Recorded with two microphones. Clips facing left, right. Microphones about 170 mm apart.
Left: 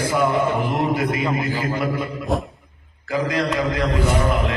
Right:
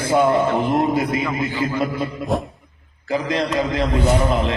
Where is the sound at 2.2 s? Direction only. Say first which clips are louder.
Right 1 dB; centre (ahead or behind).